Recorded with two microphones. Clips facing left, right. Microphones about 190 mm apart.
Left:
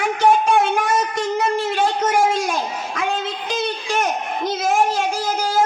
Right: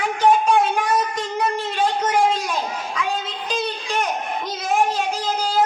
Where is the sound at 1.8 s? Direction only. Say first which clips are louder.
Right 1 dB; 45° left (ahead or behind).